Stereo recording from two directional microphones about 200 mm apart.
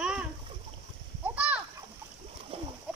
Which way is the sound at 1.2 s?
5° right (ahead or behind).